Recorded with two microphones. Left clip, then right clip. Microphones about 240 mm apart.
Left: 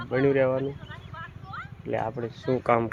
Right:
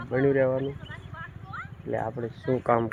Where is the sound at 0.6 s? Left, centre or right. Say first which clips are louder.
Left 1 dB; left.